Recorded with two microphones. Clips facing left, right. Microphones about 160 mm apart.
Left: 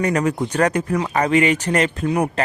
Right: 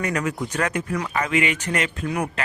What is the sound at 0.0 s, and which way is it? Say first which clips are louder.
Speech: left 6 dB; 30° left (ahead or behind).